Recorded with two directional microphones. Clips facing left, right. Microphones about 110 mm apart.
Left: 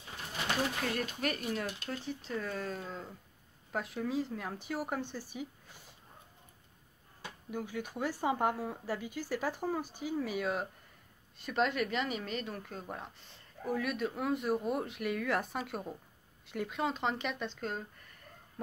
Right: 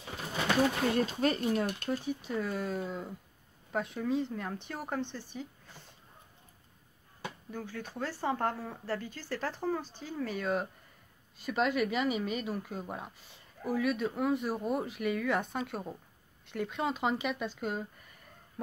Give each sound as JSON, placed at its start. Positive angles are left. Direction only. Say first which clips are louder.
{"t": 0.9, "sound": "speech", "louder": "right 6 dB", "side_deg": -30}
{"t": 1.9, "sound": "speech", "louder": "right 5 dB", "side_deg": -10}
{"t": 3.7, "sound": "speech", "louder": "right 3 dB", "side_deg": 0}
{"t": 7.5, "sound": "speech", "louder": "left 4 dB", "side_deg": 15}